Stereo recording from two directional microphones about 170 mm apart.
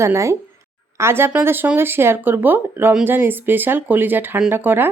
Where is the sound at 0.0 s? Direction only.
15° right (ahead or behind).